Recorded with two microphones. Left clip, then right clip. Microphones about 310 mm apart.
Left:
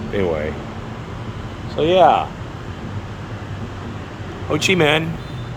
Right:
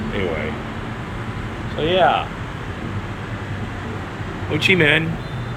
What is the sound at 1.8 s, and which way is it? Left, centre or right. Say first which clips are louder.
Speech: left 4 dB; centre.